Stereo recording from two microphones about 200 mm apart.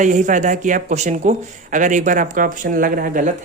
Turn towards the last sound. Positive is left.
turn(degrees=-45)  # may be behind; listen again after turning